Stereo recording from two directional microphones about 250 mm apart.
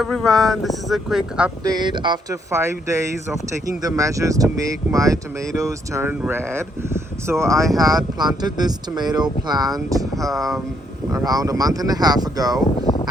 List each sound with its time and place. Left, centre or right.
0.0 s speech: centre
1.6 s speech: centre
10.3 s speech: centre
11.1 s speech: centre
12.8 s a sound: centre